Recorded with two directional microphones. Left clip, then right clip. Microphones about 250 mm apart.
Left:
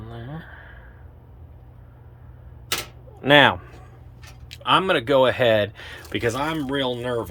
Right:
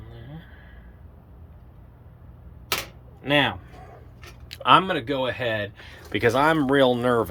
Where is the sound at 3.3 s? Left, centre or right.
Centre.